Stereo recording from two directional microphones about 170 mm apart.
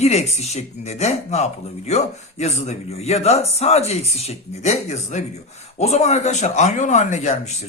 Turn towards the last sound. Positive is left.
turn(degrees=45)  # may be behind; listen again after turning